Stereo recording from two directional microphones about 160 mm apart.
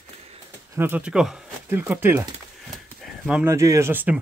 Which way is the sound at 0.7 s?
10° right (ahead or behind).